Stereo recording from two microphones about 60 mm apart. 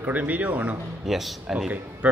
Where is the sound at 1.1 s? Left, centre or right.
Centre.